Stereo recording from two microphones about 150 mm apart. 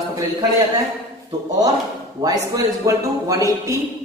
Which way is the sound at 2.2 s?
20° right (ahead or behind).